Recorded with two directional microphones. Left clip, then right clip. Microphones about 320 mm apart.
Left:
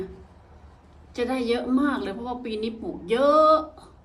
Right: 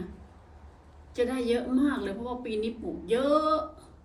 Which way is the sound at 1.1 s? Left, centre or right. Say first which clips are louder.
Left 2 dB; centre.